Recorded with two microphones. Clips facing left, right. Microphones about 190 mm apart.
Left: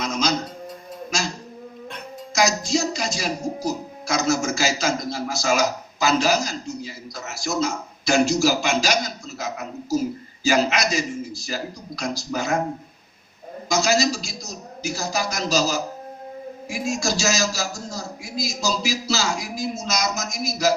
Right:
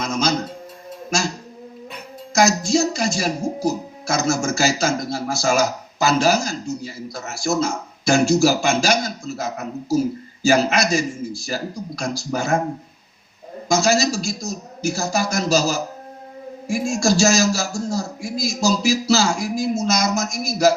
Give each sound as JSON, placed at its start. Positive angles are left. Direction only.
{"t": 0.0, "sound": "music", "side_deg": -50}
{"t": 2.3, "sound": "speech", "side_deg": -50}
{"t": 13.7, "sound": "speech", "side_deg": -50}